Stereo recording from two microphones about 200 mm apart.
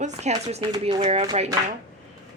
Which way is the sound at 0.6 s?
20° right (ahead or behind).